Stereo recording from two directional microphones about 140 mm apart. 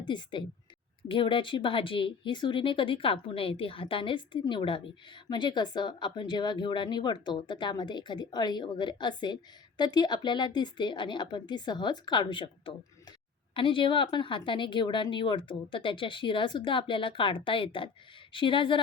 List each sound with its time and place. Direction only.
0.0 s speech: 35° left (ahead or behind)